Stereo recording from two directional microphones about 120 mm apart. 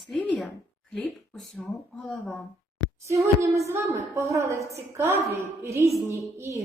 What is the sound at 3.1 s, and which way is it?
A woman's voice, 25° right (ahead or behind).